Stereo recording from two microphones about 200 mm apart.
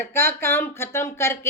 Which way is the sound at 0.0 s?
10° left (ahead or behind).